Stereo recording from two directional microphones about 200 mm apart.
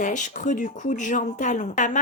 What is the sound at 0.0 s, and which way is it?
A woman's voice, 40° left (ahead or behind).